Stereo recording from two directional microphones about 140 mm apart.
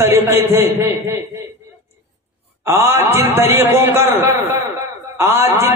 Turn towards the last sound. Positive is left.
turn(degrees=-15)  # may be behind; listen again after turning